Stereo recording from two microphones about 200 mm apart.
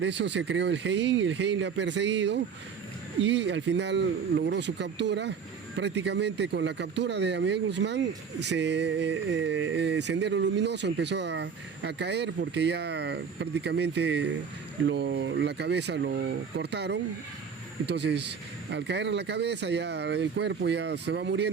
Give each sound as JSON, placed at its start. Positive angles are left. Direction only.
{"t": 0.0, "sound": "speech", "side_deg": -60}